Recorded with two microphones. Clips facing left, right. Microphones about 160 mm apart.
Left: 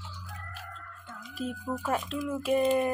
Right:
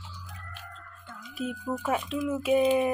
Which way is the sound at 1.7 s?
Centre (ahead or behind).